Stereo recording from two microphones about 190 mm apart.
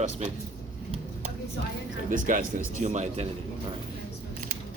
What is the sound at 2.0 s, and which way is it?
A man's voice, 45° right (ahead or behind).